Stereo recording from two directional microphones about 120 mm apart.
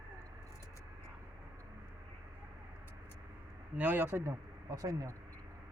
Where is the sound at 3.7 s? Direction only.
15° right (ahead or behind); by 5.1 s 30° right (ahead or behind).